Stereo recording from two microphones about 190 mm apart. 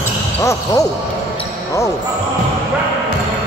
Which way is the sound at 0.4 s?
15° left (ahead or behind).